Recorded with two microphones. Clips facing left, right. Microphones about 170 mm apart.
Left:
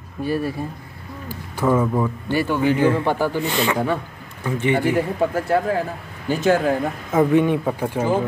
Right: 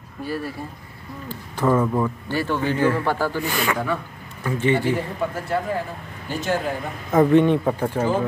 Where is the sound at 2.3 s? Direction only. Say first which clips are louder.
Left 4 dB; 15° left (ahead or behind).